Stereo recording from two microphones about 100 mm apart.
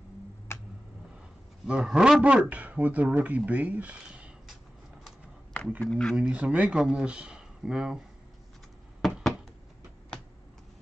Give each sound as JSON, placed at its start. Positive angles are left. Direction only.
{"t": 0.5, "sound": "tick-tock", "side_deg": 25}
{"t": 1.7, "sound": "a man's voice", "side_deg": -5}
{"t": 5.8, "sound": "speech", "side_deg": 5}
{"t": 6.1, "sound": "a man's voice", "side_deg": -10}
{"t": 9.0, "sound": "a sound", "side_deg": 0}